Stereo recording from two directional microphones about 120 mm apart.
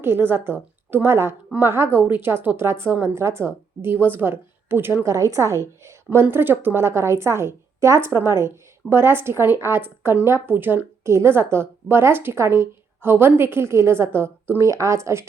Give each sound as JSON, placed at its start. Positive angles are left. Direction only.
{"t": 0.0, "sound": "a woman's voice", "side_deg": -20}